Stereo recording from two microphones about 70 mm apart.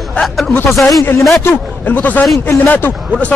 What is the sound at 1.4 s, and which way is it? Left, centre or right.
A man's voice, left.